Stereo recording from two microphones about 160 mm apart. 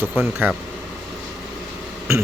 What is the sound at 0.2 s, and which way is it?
Speech, 10° right (ahead or behind).